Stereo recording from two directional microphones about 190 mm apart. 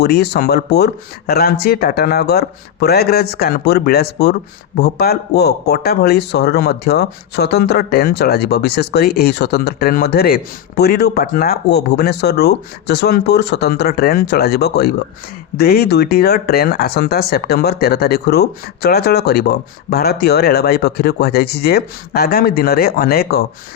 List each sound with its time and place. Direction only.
0.0 s speech: 60° left (ahead or behind)